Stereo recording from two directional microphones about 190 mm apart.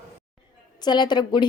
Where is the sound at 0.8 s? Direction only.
25° left (ahead or behind).